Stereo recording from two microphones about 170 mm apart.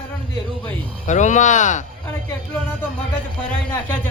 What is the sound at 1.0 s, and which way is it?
Speech, 45° left (ahead or behind).